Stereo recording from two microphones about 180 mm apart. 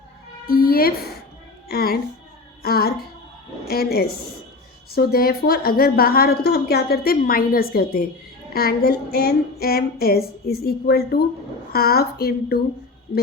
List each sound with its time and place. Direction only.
0.4 s a woman's voice: 55° left (ahead or behind)
1.6 s music: 60° left (ahead or behind)
2.6 s a sound: 55° left (ahead or behind)
3.7 s a woman's voice: 60° left (ahead or behind)